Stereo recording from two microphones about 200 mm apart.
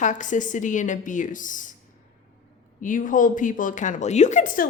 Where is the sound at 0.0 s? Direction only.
40° left (ahead or behind).